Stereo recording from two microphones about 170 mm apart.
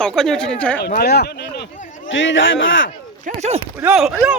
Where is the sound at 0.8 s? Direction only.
65° left (ahead or behind).